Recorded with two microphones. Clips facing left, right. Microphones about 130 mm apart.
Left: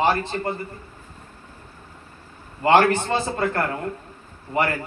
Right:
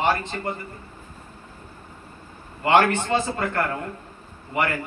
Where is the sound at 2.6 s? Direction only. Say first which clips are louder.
Left 2 dB; 35° left (ahead or behind).